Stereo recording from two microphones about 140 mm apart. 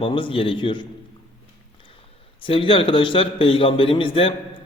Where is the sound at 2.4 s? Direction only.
40° left (ahead or behind).